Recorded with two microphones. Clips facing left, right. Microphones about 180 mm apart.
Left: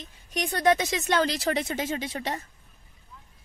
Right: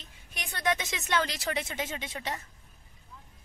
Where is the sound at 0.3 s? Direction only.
40° left (ahead or behind).